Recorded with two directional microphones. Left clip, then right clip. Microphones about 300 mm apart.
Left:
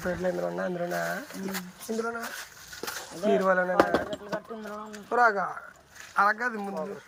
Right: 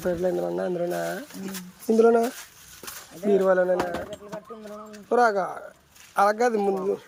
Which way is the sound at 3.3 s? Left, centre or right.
Centre.